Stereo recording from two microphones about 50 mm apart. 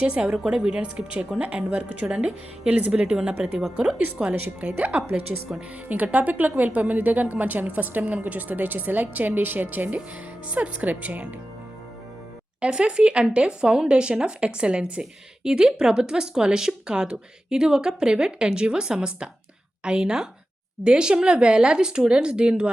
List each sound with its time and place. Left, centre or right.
0.2 s a woman's voice: centre; by 11.3 s right
12.6 s speech: right